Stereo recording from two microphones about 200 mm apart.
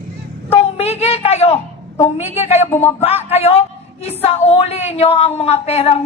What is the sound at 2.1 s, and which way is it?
A woman's voice, 35° left (ahead or behind).